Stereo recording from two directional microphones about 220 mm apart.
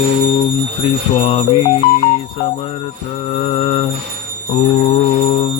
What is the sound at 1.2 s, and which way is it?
Mantra, 25° left (ahead or behind).